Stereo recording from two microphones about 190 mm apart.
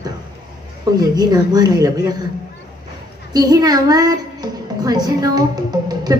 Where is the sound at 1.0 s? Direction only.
20° right (ahead or behind).